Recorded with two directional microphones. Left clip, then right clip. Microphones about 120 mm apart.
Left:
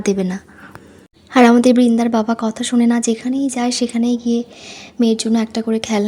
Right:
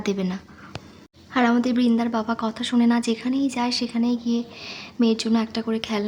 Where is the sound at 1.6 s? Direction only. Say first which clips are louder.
Left 9 dB; 65° left (ahead or behind).